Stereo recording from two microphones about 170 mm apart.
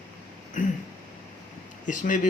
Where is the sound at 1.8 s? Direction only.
50° left (ahead or behind).